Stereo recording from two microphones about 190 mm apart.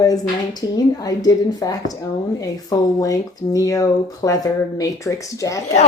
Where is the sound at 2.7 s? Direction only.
20° left (ahead or behind).